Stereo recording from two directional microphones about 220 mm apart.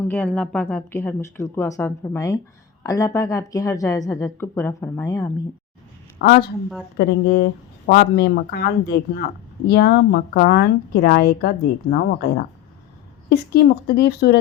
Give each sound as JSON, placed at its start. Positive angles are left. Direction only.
{"t": 0.0, "sound": "speech", "side_deg": 5}
{"t": 6.1, "sound": "a woman's voice", "side_deg": 45}
{"t": 13.3, "sound": "speech", "side_deg": 45}